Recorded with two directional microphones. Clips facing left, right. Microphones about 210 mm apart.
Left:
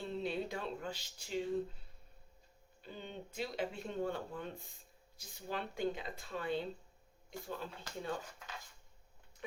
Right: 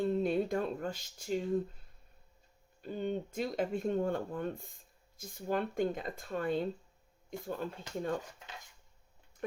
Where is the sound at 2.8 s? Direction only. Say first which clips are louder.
Right 12 dB; 50° right (ahead or behind).